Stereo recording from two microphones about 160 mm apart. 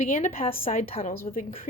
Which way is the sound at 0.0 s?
45° left (ahead or behind).